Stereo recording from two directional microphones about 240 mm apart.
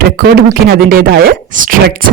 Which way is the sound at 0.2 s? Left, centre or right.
Right.